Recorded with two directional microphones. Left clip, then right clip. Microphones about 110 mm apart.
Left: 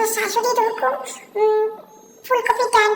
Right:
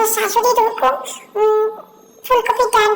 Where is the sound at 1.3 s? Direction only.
5° right (ahead or behind).